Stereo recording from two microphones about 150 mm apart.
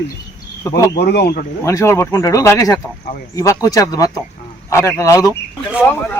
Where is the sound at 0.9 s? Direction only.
90° left.